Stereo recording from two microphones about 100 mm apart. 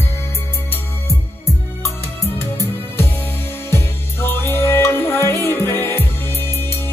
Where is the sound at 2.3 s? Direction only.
25° left (ahead or behind).